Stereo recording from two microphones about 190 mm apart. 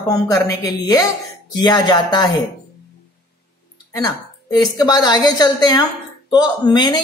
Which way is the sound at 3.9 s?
20° left (ahead or behind).